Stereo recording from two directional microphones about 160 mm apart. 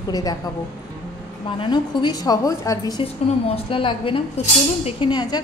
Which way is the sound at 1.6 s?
30° left (ahead or behind).